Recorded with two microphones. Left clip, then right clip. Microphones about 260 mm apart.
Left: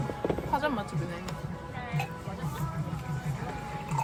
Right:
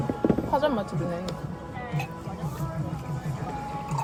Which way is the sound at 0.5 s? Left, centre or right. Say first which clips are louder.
Right 3 dB; right.